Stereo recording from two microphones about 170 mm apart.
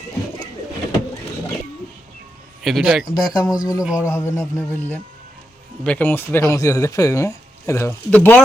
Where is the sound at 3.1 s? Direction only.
25° left (ahead or behind).